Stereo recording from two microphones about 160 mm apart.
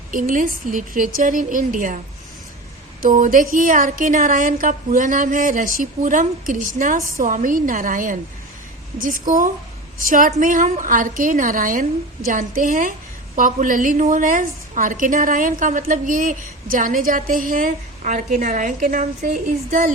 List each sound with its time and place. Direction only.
0.1 s speech: 55° right (ahead or behind)
3.0 s speech: 55° right (ahead or behind)